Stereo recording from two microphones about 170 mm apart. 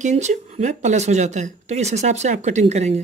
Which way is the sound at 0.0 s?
45° right (ahead or behind).